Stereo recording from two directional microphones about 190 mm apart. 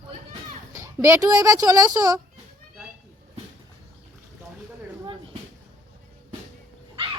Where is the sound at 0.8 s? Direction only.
15° right (ahead or behind).